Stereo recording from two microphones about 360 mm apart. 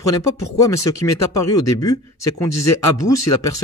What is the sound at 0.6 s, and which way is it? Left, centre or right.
Speech, centre.